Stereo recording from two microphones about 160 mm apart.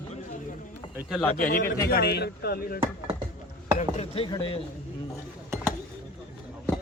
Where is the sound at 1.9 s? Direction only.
80° left.